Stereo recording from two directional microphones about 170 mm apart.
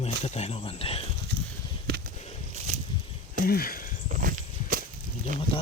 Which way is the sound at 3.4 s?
60° left (ahead or behind).